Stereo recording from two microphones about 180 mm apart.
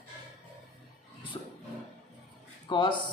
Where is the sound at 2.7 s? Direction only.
25° left (ahead or behind).